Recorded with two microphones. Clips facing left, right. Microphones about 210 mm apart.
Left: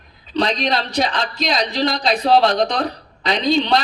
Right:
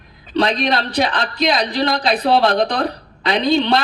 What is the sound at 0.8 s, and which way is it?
Speech, 60° right (ahead or behind).